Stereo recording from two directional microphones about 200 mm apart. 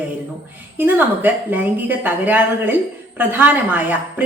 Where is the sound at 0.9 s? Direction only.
10° right (ahead or behind).